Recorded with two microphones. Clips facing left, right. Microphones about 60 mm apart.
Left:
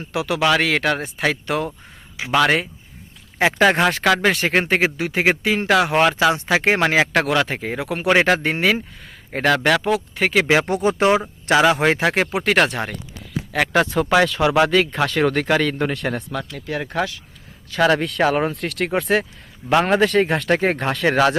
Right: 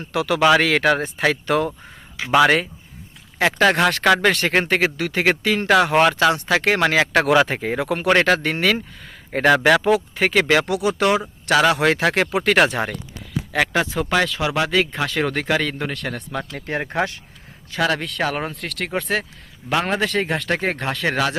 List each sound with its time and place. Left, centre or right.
0.0 s speech: centre
2.2 s speech: centre
5.7 s speech: centre
6.5 s speech: centre
8.2 s speech: centre
9.3 s speech: centre
10.4 s speech: centre
10.7 s speech: left
11.6 s speech: centre
16.5 s speech: right
17.7 s speech: centre